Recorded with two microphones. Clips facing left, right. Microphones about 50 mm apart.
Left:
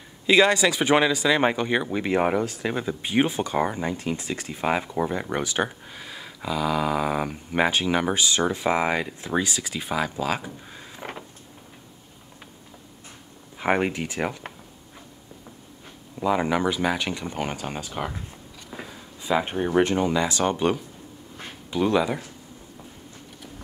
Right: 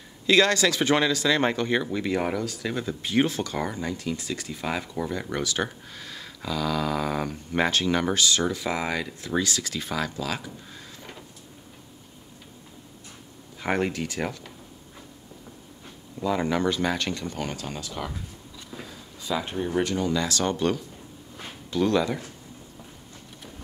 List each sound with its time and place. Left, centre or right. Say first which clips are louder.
0.3 s speech: left 2 dB; centre
11.0 s vehicle: left 11 dB; left
13.6 s speech: left 3 dB; left
16.2 s speech: left 2 dB; left
21.4 s a sound: even; centre